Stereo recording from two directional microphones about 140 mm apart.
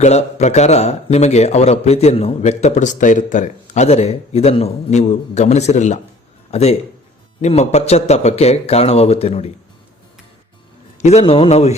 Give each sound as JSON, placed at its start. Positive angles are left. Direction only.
{"t": 0.0, "sound": "a man's voice", "side_deg": 50}
{"t": 11.0, "sound": "a man's voice", "side_deg": 50}